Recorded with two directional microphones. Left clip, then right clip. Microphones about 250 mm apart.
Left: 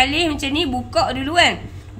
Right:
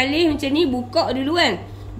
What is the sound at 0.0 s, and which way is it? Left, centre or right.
A woman's voice, left.